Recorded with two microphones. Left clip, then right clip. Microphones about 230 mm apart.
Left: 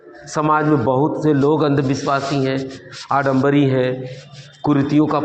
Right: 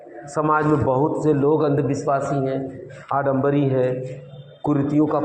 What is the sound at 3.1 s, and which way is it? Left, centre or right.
A man's voice, left.